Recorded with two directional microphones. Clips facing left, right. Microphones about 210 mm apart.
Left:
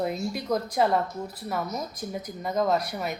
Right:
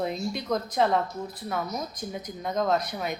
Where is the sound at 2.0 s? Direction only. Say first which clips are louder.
Left 1 dB; 5° left (ahead or behind).